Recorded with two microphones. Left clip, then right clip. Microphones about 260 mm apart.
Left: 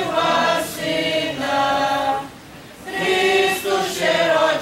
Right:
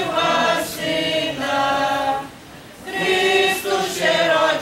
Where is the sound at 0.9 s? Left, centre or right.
Centre.